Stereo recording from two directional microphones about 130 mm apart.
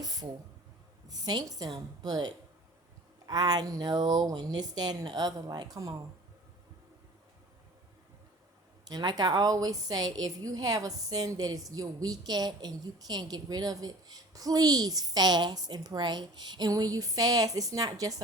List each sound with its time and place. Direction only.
0.0 s a sound: 30° right (ahead or behind)
1.0 s speech: 30° right (ahead or behind)
8.9 s a woman's voice: 30° right (ahead or behind)